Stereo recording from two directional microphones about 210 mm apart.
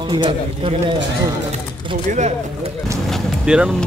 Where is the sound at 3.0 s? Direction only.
Centre (ahead or behind).